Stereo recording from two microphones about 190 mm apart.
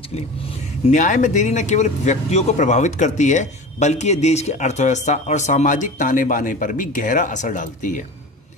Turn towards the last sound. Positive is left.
turn(degrees=40)  # may be behind; listen again after turning